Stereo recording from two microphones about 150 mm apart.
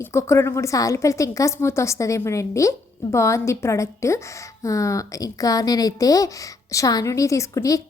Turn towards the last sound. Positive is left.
turn(degrees=20)  # may be behind; listen again after turning